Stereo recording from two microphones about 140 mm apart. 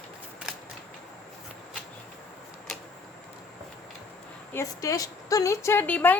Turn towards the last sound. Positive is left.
turn(degrees=10)  # may be behind; listen again after turning